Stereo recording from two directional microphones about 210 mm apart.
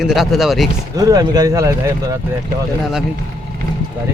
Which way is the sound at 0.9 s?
15° right (ahead or behind).